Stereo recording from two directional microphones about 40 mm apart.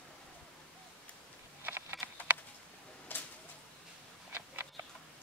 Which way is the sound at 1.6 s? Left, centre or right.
Right.